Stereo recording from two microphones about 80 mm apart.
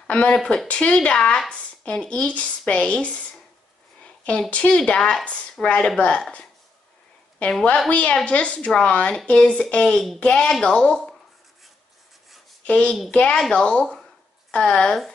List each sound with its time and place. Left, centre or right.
0.0 s speech: centre
7.9 s speech: centre
12.6 s a woman's voice: centre